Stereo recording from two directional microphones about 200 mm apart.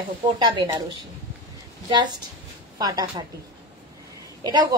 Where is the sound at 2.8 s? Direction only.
20° right (ahead or behind).